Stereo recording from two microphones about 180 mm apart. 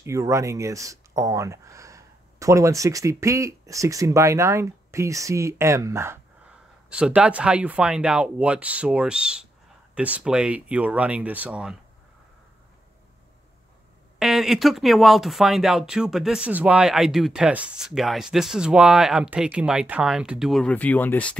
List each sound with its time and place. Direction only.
0.0 s speech: 15° right (ahead or behind)
14.1 s speech: centre (ahead or behind)